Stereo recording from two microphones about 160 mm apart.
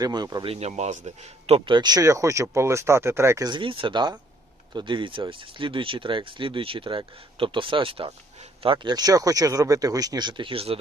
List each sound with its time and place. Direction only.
0.0 s speech: 25° right (ahead or behind)
0.4 s speech: 40° right (ahead or behind)